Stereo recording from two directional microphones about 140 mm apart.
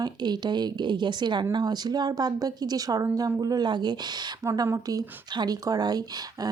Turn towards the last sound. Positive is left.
turn(degrees=-30)  # may be behind; listen again after turning